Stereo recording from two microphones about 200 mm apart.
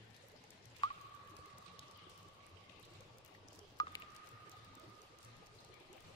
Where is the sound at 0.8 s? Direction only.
20° left (ahead or behind).